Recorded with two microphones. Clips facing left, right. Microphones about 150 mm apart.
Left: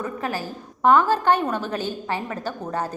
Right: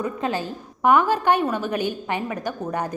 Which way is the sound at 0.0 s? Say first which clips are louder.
Right 3 dB; 20° right (ahead or behind).